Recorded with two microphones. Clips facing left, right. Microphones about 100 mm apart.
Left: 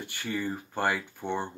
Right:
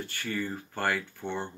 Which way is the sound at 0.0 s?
15° left (ahead or behind).